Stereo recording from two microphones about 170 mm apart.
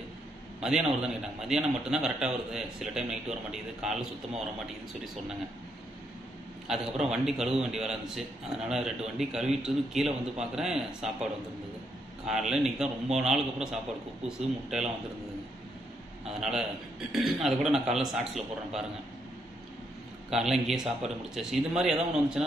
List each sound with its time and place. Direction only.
0.6 s a man's voice: 5° right (ahead or behind)
6.7 s a man's voice: 5° right (ahead or behind)
12.3 s a man's voice: 5° right (ahead or behind)
16.3 s a man's voice: 5° right (ahead or behind)
20.2 s a man's voice: 5° right (ahead or behind)